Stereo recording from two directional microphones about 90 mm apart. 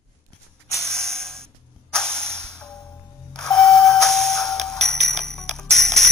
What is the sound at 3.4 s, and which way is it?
Doorbell, 5° left (ahead or behind).